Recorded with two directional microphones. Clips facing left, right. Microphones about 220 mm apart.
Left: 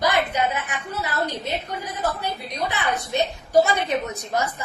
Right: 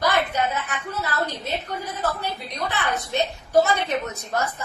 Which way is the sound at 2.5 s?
15° left (ahead or behind).